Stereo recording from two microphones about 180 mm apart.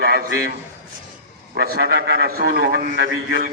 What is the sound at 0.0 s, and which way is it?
Speech, 60° right (ahead or behind).